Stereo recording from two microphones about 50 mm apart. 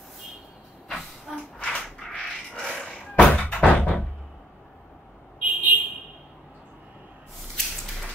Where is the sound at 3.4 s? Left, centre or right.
Left.